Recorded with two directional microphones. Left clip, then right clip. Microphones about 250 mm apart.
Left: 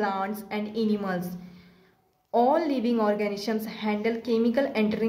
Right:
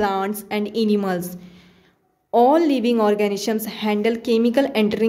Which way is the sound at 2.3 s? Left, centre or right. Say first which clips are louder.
Right 7 dB; right.